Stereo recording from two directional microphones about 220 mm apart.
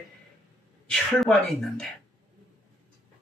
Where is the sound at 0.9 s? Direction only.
Centre (ahead or behind).